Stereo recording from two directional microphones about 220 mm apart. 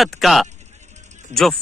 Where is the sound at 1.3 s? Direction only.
30° right (ahead or behind).